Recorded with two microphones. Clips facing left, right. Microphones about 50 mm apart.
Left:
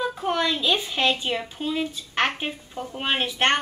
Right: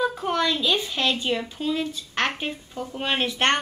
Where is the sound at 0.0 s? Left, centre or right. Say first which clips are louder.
Right 1 dB; centre.